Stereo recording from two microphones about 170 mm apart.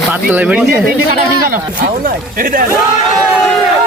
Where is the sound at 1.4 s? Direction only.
55° right (ahead or behind).